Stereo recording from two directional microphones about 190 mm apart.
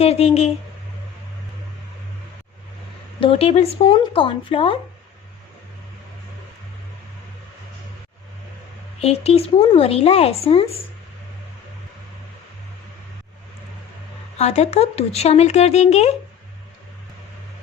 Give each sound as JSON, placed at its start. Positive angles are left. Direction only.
{"t": 0.0, "sound": "speech", "side_deg": 35}
{"t": 3.2, "sound": "speech", "side_deg": 30}
{"t": 9.0, "sound": "speech", "side_deg": 30}
{"t": 14.3, "sound": "speech", "side_deg": 35}